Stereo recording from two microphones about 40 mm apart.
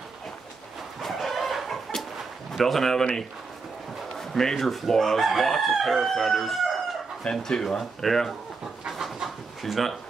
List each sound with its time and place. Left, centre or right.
1.0 s chicken: centre
2.5 s speech: centre
4.2 s chicken: centre
7.2 s speech: centre
8.0 s chicken: centre
8.9 s pant: centre